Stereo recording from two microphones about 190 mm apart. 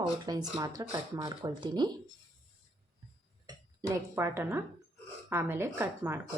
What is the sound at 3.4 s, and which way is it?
Speech, 15° right (ahead or behind).